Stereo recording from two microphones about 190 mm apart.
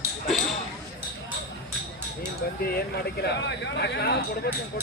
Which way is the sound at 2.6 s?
55° left (ahead or behind).